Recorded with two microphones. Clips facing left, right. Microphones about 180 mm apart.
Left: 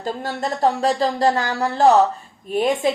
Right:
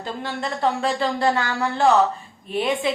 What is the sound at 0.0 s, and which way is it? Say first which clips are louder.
Speech: left 3 dB; 40° left (ahead or behind).